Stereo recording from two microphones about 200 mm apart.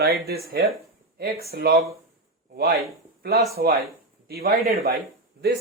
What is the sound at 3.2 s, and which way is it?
Speech, 50° right (ahead or behind).